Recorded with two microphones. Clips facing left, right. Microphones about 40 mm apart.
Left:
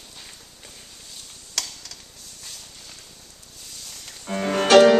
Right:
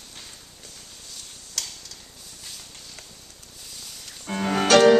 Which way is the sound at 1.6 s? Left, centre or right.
Left.